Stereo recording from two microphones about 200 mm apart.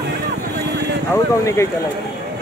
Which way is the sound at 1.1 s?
15° left (ahead or behind).